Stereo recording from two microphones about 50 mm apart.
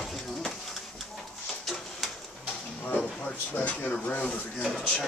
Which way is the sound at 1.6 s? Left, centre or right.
Centre.